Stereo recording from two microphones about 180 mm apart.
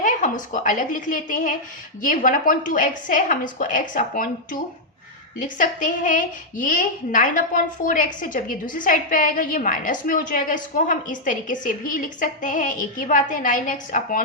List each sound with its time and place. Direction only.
0.0 s a woman's voice: 45° left (ahead or behind)
5.4 s a woman's voice: 45° left (ahead or behind)